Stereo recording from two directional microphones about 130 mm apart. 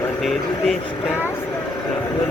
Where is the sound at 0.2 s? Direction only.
Centre (ahead or behind).